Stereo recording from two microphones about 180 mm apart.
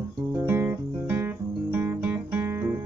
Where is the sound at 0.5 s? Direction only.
10° right (ahead or behind).